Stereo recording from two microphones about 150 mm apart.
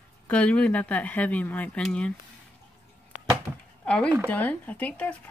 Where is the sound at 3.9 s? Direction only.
5° left (ahead or behind).